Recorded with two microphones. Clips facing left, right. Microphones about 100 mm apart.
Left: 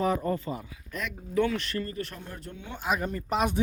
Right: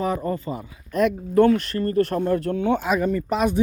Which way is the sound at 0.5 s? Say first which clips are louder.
Right 10 dB; 45° right (ahead or behind).